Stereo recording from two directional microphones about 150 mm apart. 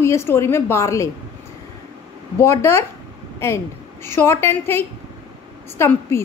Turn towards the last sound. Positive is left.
turn(degrees=15)  # may be behind; listen again after turning